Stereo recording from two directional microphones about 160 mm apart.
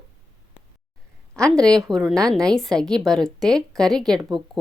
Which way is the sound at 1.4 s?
5° left (ahead or behind).